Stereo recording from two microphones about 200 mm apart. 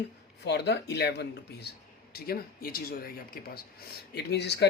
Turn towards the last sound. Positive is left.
turn(degrees=60)  # may be behind; listen again after turning